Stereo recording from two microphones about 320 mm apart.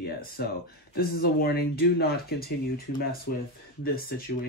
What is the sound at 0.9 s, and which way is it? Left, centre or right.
Speech, left.